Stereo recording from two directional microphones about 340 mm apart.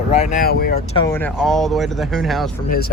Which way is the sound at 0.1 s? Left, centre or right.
Left.